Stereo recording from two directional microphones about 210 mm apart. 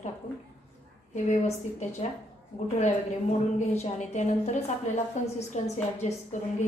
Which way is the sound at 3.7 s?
30° left (ahead or behind).